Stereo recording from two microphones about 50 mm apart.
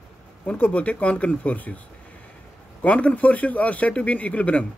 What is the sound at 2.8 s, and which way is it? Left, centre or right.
Speech, left.